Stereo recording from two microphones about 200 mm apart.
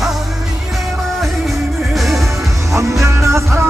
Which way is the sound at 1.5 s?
Centre (ahead or behind).